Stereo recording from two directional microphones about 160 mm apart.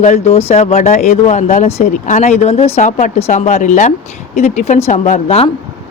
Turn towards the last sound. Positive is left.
turn(degrees=40)  # may be behind; listen again after turning